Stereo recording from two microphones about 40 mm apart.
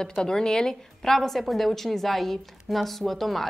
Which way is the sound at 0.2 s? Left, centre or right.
Centre.